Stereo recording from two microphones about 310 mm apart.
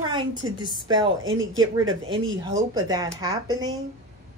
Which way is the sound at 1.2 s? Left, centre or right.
Right.